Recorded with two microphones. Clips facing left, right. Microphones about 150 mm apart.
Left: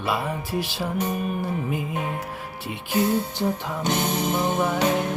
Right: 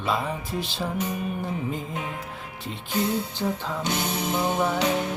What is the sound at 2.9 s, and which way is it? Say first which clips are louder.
Music: left 4 dB; 50° left (ahead or behind).